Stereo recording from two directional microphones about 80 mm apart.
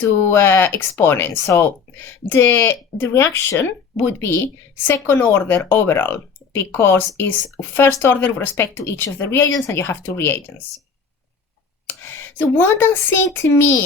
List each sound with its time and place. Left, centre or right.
0.2 s speech: left
9.5 s speech: left
9.8 s speech: left
11.9 s speech: left